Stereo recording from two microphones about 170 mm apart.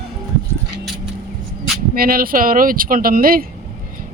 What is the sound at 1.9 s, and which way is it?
Speech, 60° right (ahead or behind).